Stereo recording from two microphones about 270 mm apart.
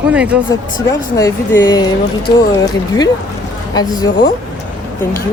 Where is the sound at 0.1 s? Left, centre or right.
Centre.